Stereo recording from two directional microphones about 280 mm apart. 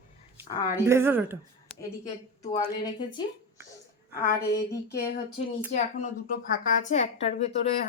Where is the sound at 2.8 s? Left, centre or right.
Centre.